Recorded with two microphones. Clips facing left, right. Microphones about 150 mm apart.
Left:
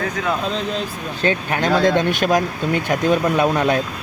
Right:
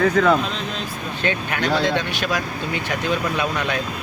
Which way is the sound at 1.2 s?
40° left (ahead or behind).